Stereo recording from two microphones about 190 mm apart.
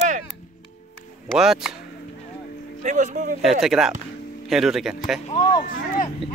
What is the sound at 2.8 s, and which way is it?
Speech, 40° right (ahead or behind).